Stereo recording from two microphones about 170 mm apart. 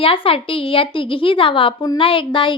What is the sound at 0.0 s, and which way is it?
A woman's voice, 30° left (ahead or behind).